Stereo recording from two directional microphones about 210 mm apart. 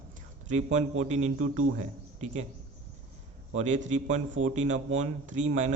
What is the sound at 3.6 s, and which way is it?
Speech, 35° right (ahead or behind).